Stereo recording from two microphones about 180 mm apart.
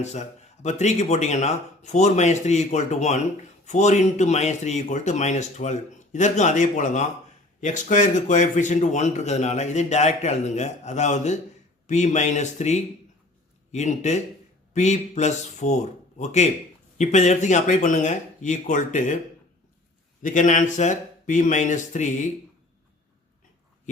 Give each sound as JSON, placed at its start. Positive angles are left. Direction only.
{"t": 0.0, "sound": "a man's voice", "side_deg": 40}
{"t": 20.2, "sound": "speech", "side_deg": 45}